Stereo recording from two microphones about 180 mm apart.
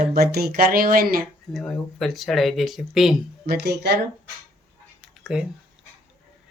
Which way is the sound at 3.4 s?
65° right (ahead or behind).